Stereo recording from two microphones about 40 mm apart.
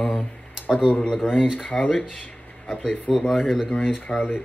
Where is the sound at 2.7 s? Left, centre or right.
Left.